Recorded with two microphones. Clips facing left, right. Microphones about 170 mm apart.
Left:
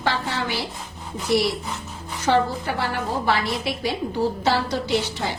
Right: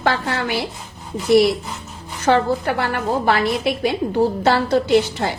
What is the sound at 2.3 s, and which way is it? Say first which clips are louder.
Speech: right 3 dB; 50° right (ahead or behind).